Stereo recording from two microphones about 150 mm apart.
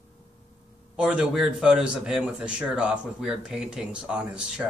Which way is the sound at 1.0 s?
5° right (ahead or behind).